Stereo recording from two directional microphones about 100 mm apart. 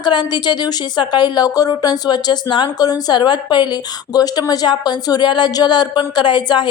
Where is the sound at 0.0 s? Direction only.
45° left (ahead or behind).